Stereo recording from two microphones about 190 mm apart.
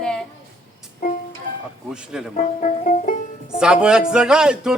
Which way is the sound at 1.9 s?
5° right (ahead or behind).